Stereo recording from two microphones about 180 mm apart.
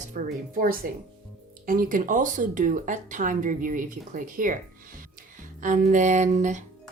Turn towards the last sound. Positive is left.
turn(degrees=-40)  # may be behind; listen again after turning